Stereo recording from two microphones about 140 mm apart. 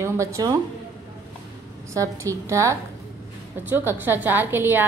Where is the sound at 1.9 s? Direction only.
20° right (ahead or behind).